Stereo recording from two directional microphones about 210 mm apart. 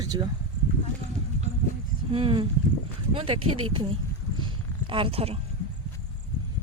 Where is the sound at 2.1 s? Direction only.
25° right (ahead or behind).